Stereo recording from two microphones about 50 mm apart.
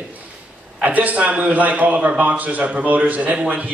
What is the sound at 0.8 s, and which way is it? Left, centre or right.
Speech, right.